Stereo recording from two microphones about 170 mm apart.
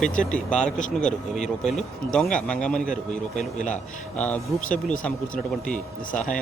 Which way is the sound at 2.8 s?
50° left (ahead or behind).